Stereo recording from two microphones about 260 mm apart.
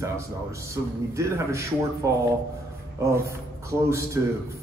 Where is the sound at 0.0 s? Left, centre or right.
Centre.